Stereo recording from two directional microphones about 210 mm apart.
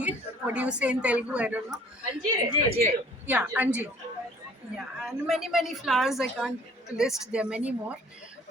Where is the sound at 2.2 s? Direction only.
35° right (ahead or behind).